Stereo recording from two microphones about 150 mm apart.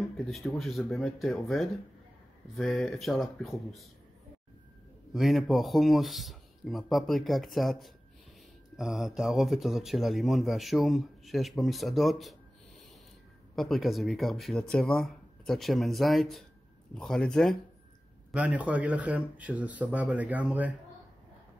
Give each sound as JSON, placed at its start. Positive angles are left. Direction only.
{"t": 0.3, "sound": "speech", "side_deg": 0}
{"t": 5.1, "sound": "speech", "side_deg": 0}
{"t": 13.6, "sound": "speech", "side_deg": 0}
{"t": 18.3, "sound": "speech", "side_deg": -10}